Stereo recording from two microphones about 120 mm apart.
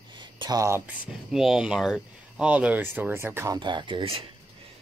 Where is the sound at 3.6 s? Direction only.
40° right (ahead or behind).